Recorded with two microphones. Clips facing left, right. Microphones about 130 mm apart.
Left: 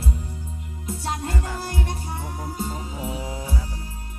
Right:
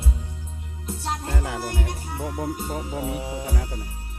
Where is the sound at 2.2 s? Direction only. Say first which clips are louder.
Right 5 dB; 90° right.